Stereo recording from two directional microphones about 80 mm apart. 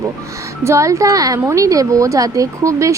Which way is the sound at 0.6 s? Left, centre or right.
Right.